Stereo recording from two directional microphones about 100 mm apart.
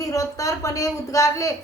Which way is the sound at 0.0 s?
35° left (ahead or behind).